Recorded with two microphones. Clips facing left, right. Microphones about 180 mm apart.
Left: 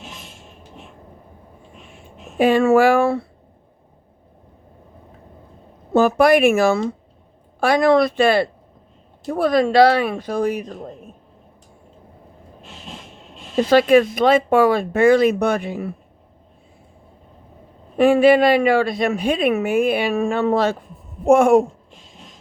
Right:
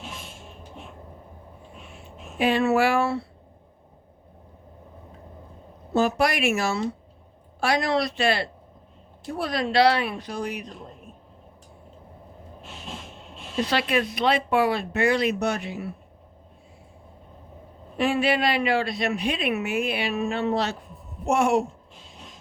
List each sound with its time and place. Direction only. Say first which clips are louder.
2.0 s speech: left 7 dB; 50° left (ahead or behind)
5.9 s a woman's voice: left 8 dB; 55° left (ahead or behind)
13.7 s a woman's voice: left 13 dB; 50° left (ahead or behind)
17.9 s a woman's voice: left 10 dB; 50° left (ahead or behind)